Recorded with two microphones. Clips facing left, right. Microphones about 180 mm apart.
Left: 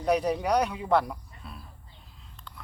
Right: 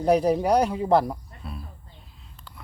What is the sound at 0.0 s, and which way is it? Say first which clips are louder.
Speech: right 5 dB; 30° right (ahead or behind).